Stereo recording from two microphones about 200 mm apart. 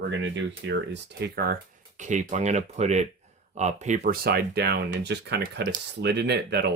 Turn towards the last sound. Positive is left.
turn(degrees=-55)  # may be behind; listen again after turning